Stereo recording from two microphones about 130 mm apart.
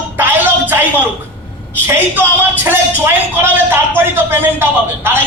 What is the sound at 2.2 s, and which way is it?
Speech, 15° right (ahead or behind).